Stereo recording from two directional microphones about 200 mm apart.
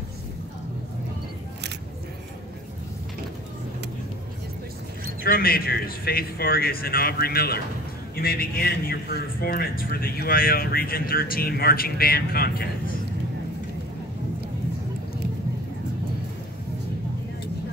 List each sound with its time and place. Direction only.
5.2 s a man's voice: 50° left (ahead or behind)